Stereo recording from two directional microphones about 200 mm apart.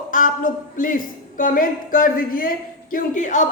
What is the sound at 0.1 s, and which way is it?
A woman's voice, 40° left (ahead or behind).